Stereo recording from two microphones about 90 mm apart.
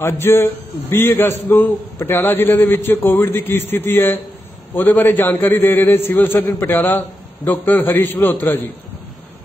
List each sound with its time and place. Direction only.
0.0 s a man's voice: 30° left (ahead or behind)